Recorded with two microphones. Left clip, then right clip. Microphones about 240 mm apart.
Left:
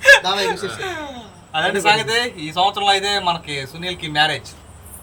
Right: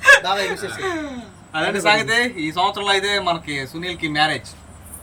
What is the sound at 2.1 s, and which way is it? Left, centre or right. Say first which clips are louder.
A man's voice: right 1 dB; centre.